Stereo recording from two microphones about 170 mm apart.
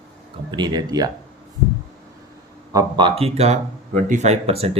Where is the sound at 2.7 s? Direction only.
25° right (ahead or behind).